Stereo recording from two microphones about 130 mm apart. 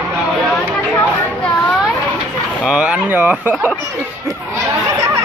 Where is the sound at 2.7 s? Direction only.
10° right (ahead or behind).